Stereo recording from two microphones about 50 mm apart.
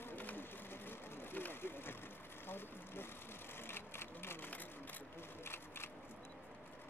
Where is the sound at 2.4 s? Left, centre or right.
Left.